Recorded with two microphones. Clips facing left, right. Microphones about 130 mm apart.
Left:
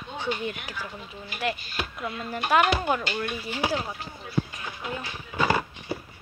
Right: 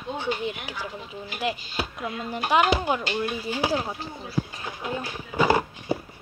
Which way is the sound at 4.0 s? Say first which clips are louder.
Even; 35° right (ahead or behind).